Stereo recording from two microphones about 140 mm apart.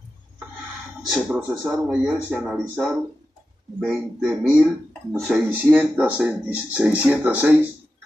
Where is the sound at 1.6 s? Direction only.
10° right (ahead or behind).